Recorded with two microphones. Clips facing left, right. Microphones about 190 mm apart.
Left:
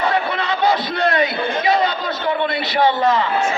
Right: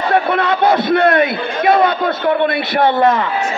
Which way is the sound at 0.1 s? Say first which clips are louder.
Right 6 dB; 55° right (ahead or behind).